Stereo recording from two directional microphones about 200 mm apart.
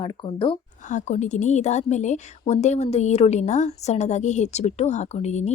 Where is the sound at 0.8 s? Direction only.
40° left (ahead or behind).